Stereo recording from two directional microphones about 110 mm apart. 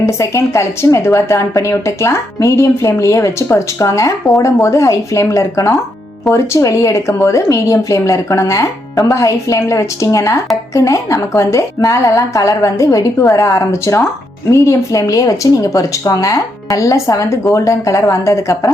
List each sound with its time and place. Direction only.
0.0 s a woman's voice: 25° left (ahead or behind)